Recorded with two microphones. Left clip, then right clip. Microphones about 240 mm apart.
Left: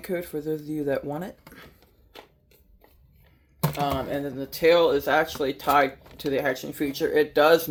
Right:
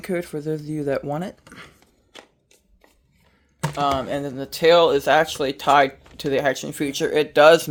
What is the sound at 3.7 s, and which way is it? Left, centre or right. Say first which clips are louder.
Speech: right 6 dB; right.